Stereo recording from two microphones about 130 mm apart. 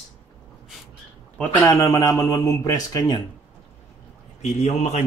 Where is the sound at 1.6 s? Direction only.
25° left (ahead or behind).